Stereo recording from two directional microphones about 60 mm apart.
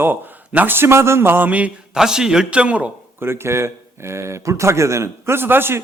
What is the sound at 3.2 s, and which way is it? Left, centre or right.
Speech, right.